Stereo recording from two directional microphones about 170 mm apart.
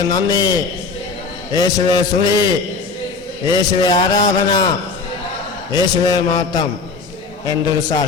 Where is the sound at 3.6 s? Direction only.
25° left (ahead or behind).